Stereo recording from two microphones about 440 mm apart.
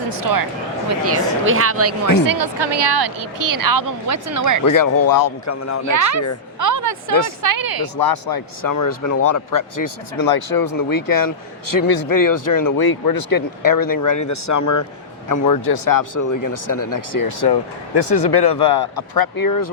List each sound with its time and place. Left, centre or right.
0.1 s a woman's voice: right
1.0 s speech: right
2.3 s a woman's voice: right
4.6 s speech: left
5.9 s speech: right
6.6 s a sound: right
7.4 s a woman's voice: right
7.9 s speech: left